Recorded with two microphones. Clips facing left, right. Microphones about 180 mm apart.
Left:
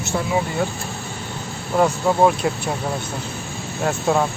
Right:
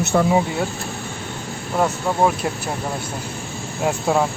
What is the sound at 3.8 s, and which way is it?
Speech, 5° right (ahead or behind).